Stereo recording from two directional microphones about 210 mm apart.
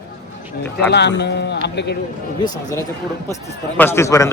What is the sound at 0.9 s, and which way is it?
Speech, 55° left (ahead or behind).